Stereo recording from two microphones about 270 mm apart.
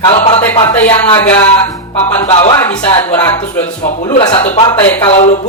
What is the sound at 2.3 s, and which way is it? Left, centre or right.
Speech, left.